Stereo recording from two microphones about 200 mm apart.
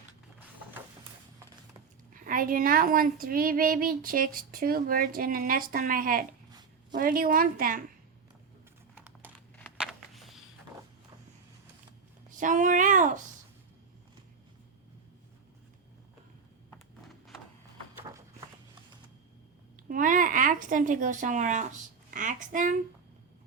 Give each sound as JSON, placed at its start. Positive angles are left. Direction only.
{"t": 2.1, "sound": "a woman's voice", "side_deg": -45}
{"t": 9.0, "sound": "crumpling", "side_deg": -10}
{"t": 9.6, "sound": "a sound", "side_deg": -5}
{"t": 12.4, "sound": "speech", "side_deg": -40}
{"t": 18.1, "sound": "walk", "side_deg": -15}
{"t": 19.9, "sound": "speech", "side_deg": -40}